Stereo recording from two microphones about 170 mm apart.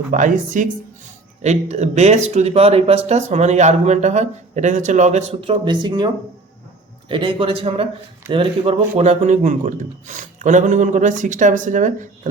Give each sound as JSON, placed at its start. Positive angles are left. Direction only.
{"t": 0.1, "sound": "a man's voice", "side_deg": -50}
{"t": 7.1, "sound": "a man's voice", "side_deg": -30}